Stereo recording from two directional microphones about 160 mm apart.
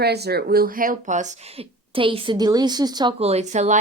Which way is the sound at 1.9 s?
35° right (ahead or behind).